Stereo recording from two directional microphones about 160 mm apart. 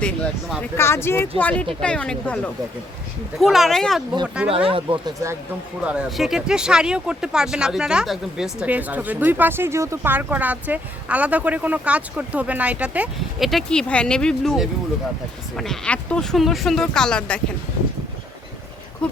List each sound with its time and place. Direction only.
0.8 s speech: 15° left (ahead or behind)
4.4 s speech: 10° right (ahead or behind)
5.8 s speech: 5° right (ahead or behind)